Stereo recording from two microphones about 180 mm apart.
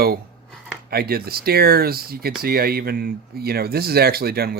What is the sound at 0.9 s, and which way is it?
Speech, 60° right (ahead or behind).